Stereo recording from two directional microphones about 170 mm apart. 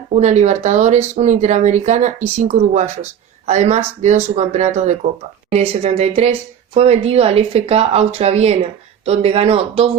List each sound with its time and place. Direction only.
0.1 s a woman's voice: 45° right (ahead or behind)